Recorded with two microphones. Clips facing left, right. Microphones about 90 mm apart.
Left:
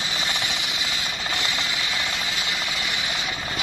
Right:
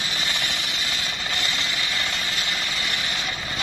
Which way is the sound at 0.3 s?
15° left (ahead or behind).